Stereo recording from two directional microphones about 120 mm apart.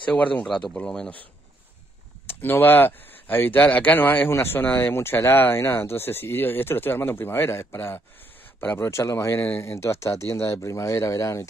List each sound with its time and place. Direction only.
0.1 s speech: 15° left (ahead or behind)
2.2 s speech: 15° left (ahead or behind)